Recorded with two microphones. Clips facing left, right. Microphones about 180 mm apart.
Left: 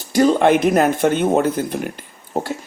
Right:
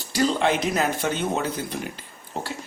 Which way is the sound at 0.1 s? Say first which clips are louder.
Left 8 dB; 50° left (ahead or behind).